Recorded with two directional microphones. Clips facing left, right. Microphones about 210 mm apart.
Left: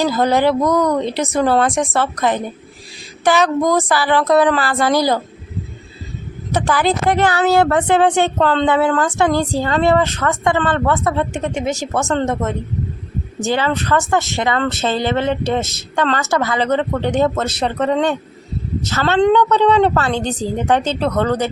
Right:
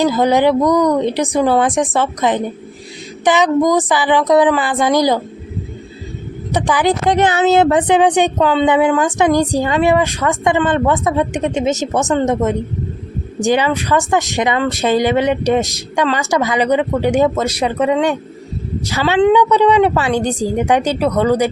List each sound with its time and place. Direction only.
0.0 s speech: 15° right (ahead or behind)
6.5 s speech: 15° right (ahead or behind)